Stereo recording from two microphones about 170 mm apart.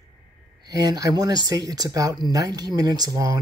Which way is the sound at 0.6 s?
20° right (ahead or behind).